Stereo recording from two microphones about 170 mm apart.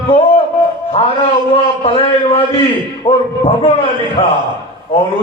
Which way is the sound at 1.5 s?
30° left (ahead or behind).